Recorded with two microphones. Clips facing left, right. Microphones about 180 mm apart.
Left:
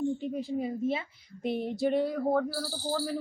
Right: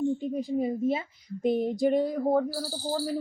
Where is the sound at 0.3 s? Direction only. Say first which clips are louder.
Right 4 dB; 15° right (ahead or behind).